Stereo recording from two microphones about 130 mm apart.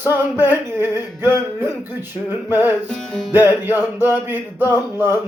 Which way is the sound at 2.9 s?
5° left (ahead or behind).